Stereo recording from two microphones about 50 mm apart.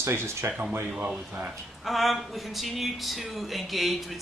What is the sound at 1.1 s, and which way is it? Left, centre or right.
Speech, right.